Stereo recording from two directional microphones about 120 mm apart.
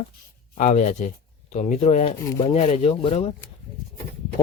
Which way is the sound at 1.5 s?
70° left (ahead or behind).